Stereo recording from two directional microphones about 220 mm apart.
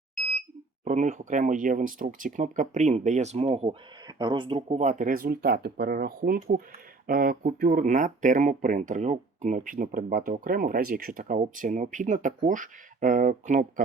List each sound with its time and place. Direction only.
0.9 s speech: 35° right (ahead or behind)